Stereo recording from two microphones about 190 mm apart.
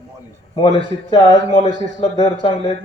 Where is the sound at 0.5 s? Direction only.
30° left (ahead or behind).